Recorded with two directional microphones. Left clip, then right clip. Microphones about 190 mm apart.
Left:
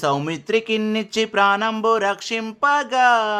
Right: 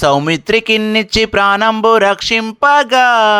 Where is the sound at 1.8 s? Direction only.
30° right (ahead or behind).